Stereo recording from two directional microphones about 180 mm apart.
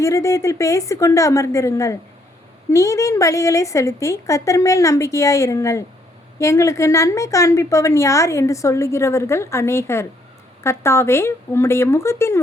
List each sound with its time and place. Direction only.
0.0 s a woman's voice: 15° left (ahead or behind)